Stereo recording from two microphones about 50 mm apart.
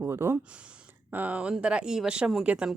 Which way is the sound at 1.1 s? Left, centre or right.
Right.